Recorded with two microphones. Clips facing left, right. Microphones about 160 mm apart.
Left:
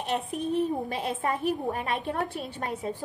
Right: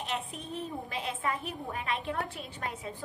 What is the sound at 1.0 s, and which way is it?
A woman's voice, 45° left (ahead or behind).